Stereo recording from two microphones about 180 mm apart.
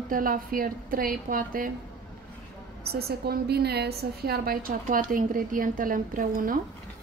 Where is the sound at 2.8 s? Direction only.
60° right (ahead or behind).